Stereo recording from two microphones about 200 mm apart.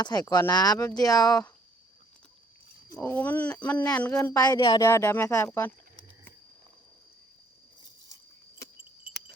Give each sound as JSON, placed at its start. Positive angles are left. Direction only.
{"t": 0.0, "sound": "speech", "side_deg": 20}
{"t": 2.9, "sound": "speech", "side_deg": 10}
{"t": 8.1, "sound": "a sound", "side_deg": 15}